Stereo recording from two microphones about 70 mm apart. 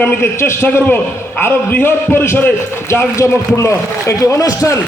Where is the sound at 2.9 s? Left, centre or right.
Left.